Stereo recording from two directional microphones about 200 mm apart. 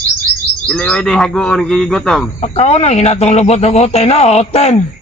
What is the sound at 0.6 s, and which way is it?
Speech, 5° left (ahead or behind).